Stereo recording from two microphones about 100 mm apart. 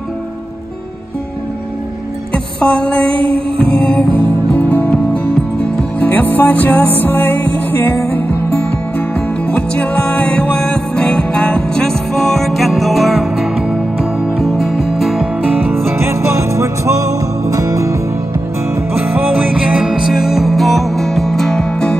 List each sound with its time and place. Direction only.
2.3 s music: 10° left (ahead or behind)
3.1 s music: 65° right (ahead or behind)
3.7 s music: 15° left (ahead or behind)
15.6 s music: 25° right (ahead or behind)
18.9 s music: 20° right (ahead or behind); by 21.9 s 5° left (ahead or behind)